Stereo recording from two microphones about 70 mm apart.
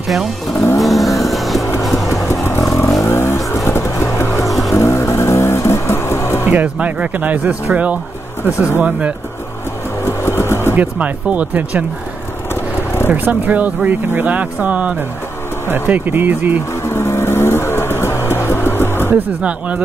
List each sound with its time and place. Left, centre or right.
0.7 s vehicle: centre
1.2 s music: centre
1.6 s music: left
2.4 s vehicle: left
4.5 s music: centre
4.7 s music: left
6.4 s speech: right
10.0 s vehicle: left
10.8 s speech: right
13.1 s speech: right
16.8 s vehicle: left
19.1 s speech: centre